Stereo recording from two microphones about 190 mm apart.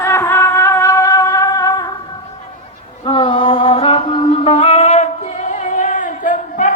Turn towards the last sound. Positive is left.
turn(degrees=45)  # may be behind; listen again after turning